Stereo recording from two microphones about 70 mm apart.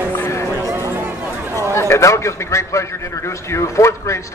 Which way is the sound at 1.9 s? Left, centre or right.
Left.